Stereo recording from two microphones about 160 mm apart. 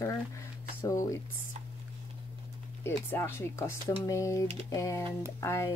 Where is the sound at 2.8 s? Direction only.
15° left (ahead or behind).